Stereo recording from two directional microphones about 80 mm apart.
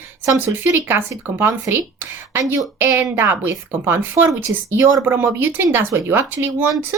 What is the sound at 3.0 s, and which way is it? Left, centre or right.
Speech, right.